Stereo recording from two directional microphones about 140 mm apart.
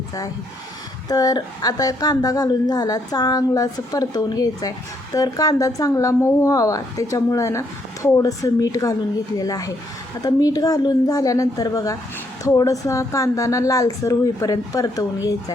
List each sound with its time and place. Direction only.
1.0 s a woman's voice: 25° left (ahead or behind)